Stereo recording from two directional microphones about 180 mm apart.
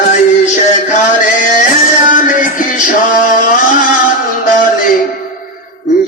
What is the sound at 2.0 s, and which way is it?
Music, 45° left (ahead or behind).